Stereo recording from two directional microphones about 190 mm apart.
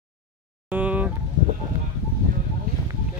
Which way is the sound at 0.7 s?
10° right (ahead or behind).